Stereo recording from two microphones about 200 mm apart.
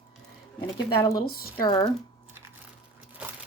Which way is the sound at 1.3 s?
50° left (ahead or behind).